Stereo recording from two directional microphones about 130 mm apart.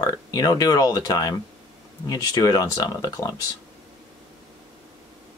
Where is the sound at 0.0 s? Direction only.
25° left (ahead or behind).